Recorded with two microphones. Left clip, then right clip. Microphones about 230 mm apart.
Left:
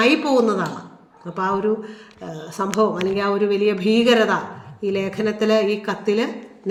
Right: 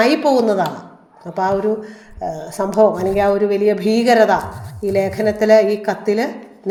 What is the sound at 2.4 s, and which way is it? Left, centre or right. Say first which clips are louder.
Speech: right 6 dB; centre.